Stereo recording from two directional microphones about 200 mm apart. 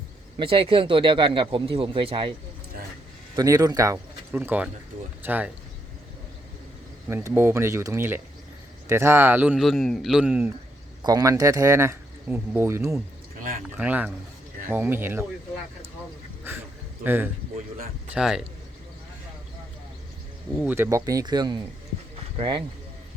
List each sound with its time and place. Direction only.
0.3 s speech: 25° right (ahead or behind)
3.3 s speech: 20° right (ahead or behind)
7.1 s speech: 10° right (ahead or behind)
11.0 s speech: 20° right (ahead or behind)
17.0 s speech: 10° right (ahead or behind)
20.6 s speech: 10° right (ahead or behind)